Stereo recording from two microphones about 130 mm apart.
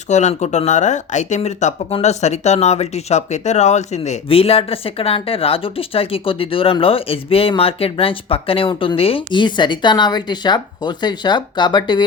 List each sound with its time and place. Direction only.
0.1 s speech: 65° left (ahead or behind)
1.4 s speech: 55° left (ahead or behind); by 12.0 s 35° left (ahead or behind)